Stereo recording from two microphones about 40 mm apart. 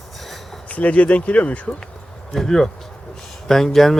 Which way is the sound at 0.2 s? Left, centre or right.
Centre.